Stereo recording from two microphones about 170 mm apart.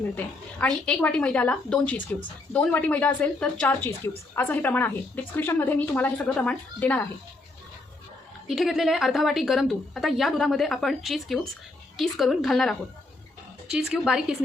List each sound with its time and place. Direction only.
0.0 s a woman's voice: 10° left (ahead or behind)
8.4 s a woman's voice: centre (ahead or behind)